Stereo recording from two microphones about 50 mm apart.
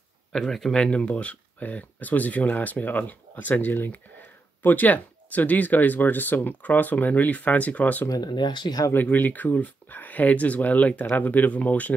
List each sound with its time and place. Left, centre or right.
0.3 s speech: centre
0.7 s speech: centre